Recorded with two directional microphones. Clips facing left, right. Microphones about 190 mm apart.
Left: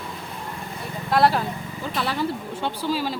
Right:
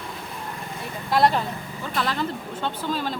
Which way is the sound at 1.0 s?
Centre (ahead or behind).